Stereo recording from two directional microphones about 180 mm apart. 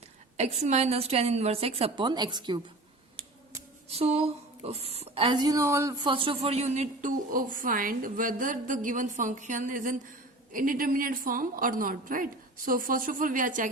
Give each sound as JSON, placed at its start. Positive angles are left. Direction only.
{"t": 0.3, "sound": "a woman's voice", "side_deg": -40}
{"t": 3.8, "sound": "a woman's voice", "side_deg": -35}